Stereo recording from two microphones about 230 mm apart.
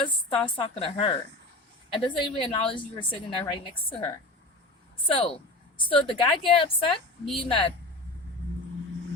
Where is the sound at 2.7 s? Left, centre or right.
Left.